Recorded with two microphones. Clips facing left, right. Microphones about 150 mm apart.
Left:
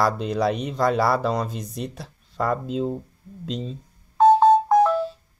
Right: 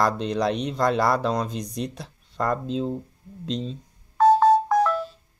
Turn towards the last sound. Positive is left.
turn(degrees=25)  # may be behind; listen again after turning